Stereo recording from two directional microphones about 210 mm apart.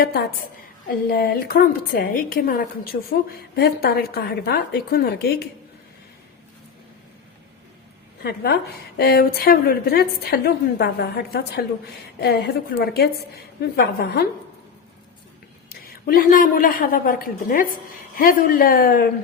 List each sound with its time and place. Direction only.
0.0 s a woman's voice: 50° left (ahead or behind)
8.2 s a woman's voice: 50° left (ahead or behind)
15.7 s a woman's voice: 45° left (ahead or behind)